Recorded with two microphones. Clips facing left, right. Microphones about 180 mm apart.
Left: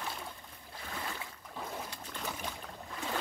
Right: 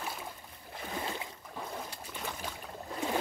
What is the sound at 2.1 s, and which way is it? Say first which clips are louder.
Boat: even; 5° right (ahead or behind).